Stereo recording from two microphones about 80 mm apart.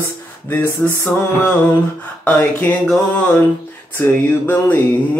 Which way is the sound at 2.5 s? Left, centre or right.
Centre.